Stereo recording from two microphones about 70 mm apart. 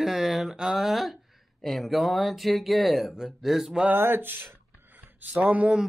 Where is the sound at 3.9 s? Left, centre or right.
Right.